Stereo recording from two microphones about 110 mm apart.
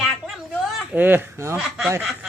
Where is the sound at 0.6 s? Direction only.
15° right (ahead or behind).